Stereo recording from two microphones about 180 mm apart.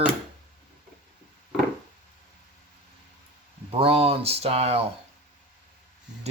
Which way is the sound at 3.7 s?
30° right (ahead or behind).